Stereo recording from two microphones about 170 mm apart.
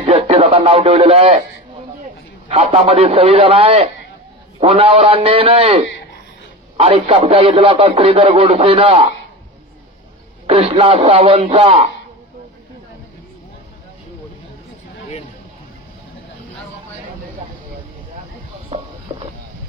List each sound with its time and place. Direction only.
0.0 s speech: 35° right (ahead or behind)
2.5 s a man's voice: 35° right (ahead or behind)
10.4 s a man's voice: 35° right (ahead or behind)